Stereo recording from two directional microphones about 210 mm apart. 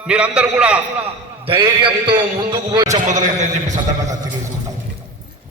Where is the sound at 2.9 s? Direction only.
35° right (ahead or behind).